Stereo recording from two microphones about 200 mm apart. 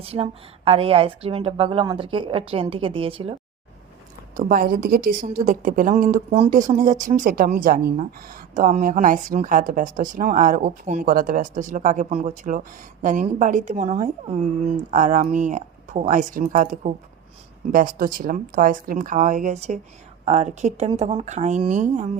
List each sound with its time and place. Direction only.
0.0 s a woman's voice: 30° right (ahead or behind)
4.4 s a woman's voice: 45° right (ahead or behind)